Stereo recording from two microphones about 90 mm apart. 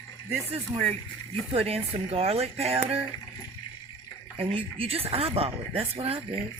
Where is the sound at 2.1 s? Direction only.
90° right.